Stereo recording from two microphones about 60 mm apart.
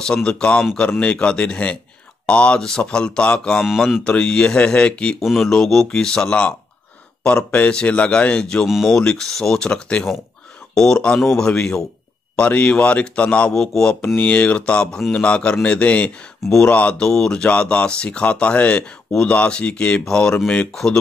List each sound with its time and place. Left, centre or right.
0.0 s speech: centre
5.2 s speech: centre
7.5 s speech: left; by 11.4 s centre
11.4 s speech: centre
13.6 s speech: centre
14.0 s speech: left
17.0 s speech: centre